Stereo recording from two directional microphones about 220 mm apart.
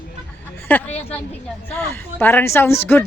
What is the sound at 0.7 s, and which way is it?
Speech, 5° left (ahead or behind).